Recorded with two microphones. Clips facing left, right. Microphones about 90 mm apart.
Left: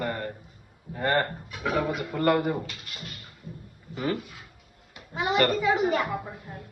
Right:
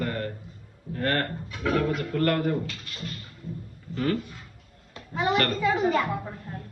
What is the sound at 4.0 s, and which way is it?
A child's voice, 10° left (ahead or behind).